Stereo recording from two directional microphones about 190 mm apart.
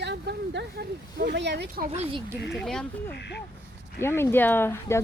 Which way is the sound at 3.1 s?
60° left (ahead or behind).